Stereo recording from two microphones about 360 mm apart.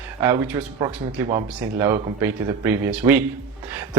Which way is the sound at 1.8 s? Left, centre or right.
Centre.